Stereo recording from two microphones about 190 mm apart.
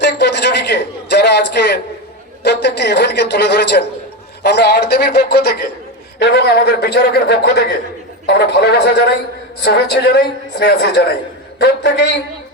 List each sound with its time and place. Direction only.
0.0 s a man's voice: 60° left (ahead or behind)